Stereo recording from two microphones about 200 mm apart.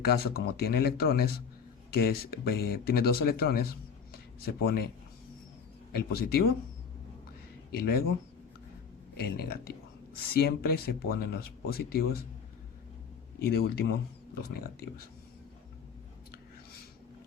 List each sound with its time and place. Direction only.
0.0 s speech: 50° left (ahead or behind)
5.9 s speech: 50° left (ahead or behind)
7.7 s speech: 50° left (ahead or behind)
9.1 s speech: 50° left (ahead or behind)
13.4 s speech: 50° left (ahead or behind)